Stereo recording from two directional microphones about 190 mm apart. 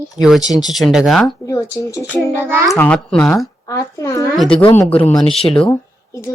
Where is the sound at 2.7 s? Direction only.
10° left (ahead or behind).